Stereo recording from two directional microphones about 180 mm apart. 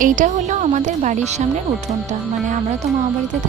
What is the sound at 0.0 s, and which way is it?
Speech, 45° right (ahead or behind).